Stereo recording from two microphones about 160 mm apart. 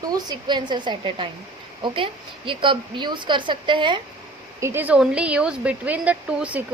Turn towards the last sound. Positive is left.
turn(degrees=-10)  # may be behind; listen again after turning